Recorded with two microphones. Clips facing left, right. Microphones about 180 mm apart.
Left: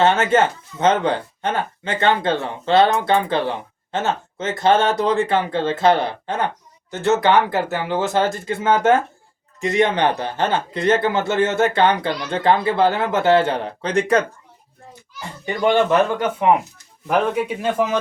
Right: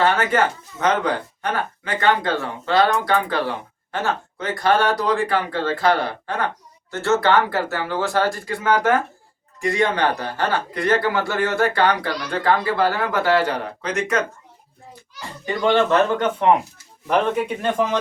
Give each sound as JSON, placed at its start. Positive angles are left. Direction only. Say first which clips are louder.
{"t": 0.0, "sound": "speech", "louder": "left 3 dB", "side_deg": 25}
{"t": 15.6, "sound": "speech", "louder": "left 1 dB", "side_deg": 15}